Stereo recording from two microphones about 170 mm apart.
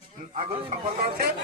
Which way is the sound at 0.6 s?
60° right (ahead or behind).